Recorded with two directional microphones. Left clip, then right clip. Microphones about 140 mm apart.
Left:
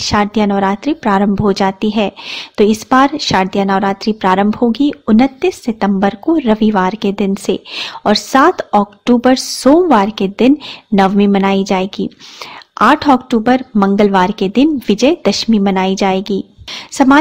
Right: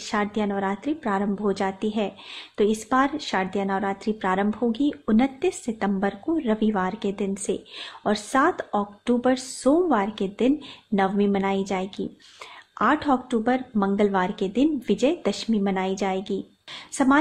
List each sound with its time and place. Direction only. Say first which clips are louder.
0.1 s a woman's voice: left 11 dB; 40° left (ahead or behind)